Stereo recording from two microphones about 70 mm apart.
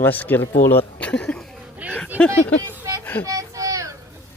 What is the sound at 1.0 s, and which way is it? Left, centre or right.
Speech, centre.